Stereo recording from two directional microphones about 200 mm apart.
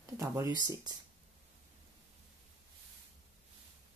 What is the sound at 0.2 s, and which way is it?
Speech, 15° right (ahead or behind).